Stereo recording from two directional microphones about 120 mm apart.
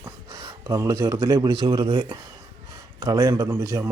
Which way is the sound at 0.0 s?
35° right (ahead or behind).